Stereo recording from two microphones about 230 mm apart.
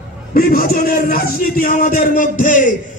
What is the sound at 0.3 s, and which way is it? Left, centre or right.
A man's voice, left.